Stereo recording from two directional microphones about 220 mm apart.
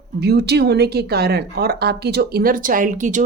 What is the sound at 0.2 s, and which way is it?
Speech, 45° right (ahead or behind).